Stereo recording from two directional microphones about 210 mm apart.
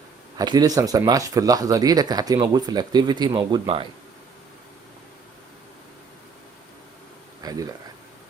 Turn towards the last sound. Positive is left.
turn(degrees=-20)  # may be behind; listen again after turning